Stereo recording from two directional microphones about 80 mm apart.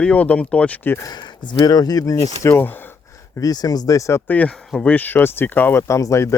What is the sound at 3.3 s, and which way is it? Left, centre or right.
Speech, left.